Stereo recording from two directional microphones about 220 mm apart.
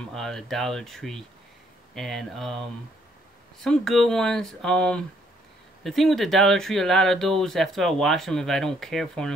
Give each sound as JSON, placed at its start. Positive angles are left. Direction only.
{"t": 0.1, "sound": "speech", "side_deg": 0}
{"t": 3.6, "sound": "speech", "side_deg": 0}